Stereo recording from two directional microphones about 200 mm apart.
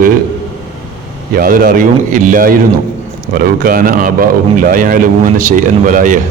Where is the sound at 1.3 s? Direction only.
45° right (ahead or behind).